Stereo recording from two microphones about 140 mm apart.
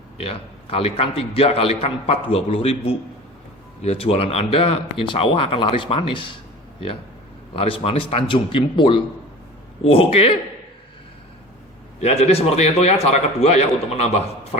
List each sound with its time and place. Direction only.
0.2 s a man's voice: 40° left (ahead or behind)
7.5 s a man's voice: 40° left (ahead or behind)
11.9 s a man's voice: 50° left (ahead or behind)